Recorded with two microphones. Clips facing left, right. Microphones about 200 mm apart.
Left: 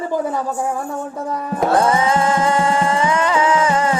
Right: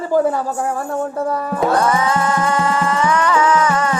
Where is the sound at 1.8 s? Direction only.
25° left (ahead or behind).